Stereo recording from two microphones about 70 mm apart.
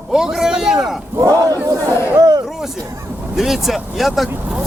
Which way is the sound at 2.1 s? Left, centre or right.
Right.